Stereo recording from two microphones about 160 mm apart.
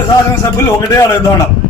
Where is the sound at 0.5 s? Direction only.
20° left (ahead or behind).